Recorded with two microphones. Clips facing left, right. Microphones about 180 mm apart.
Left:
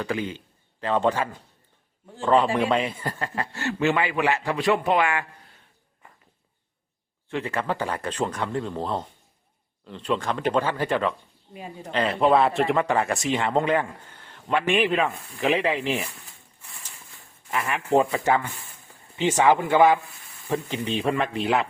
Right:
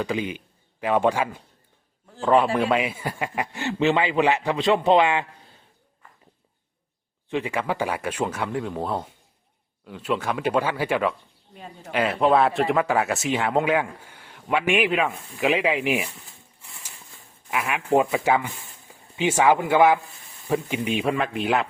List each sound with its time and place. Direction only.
0.0 s a man's voice: 15° right (ahead or behind)
7.3 s speech: 15° right (ahead or behind)
17.5 s speech: 5° right (ahead or behind)